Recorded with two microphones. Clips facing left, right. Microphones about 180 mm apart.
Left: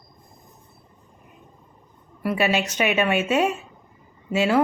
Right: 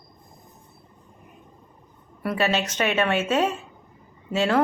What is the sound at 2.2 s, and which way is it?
A man's voice, 5° left (ahead or behind).